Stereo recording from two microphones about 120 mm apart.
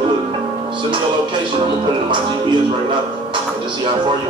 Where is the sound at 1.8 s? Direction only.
40° right (ahead or behind).